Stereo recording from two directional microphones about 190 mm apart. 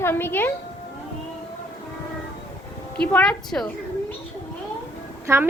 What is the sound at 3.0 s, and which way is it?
Speech, 5° left (ahead or behind).